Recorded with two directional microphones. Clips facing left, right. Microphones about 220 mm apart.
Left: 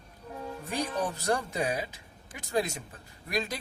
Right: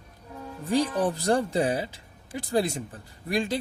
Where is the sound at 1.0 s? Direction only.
35° right (ahead or behind).